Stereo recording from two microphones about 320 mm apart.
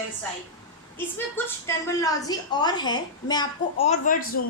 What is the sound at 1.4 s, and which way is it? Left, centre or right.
A woman's voice, centre.